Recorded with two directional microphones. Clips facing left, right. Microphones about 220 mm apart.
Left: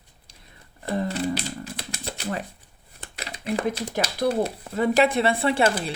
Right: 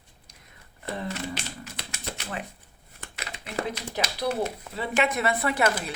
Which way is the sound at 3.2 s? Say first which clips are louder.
Left 10 dB; 35° left (ahead or behind).